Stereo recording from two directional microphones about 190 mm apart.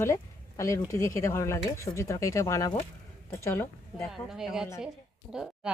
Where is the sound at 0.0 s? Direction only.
15° left (ahead or behind).